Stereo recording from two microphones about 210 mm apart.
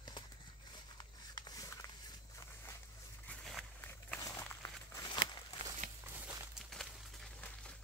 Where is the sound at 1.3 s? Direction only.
20° left (ahead or behind).